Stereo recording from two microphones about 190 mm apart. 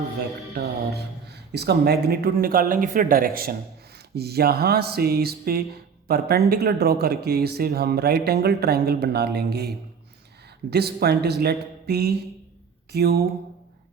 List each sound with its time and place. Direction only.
0.5 s speech: 60° right (ahead or behind)